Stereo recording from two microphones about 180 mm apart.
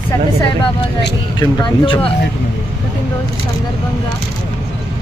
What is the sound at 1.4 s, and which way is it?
Speech, 25° left (ahead or behind).